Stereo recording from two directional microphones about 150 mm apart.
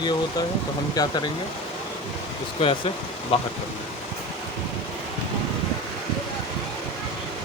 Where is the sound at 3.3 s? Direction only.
40° left (ahead or behind).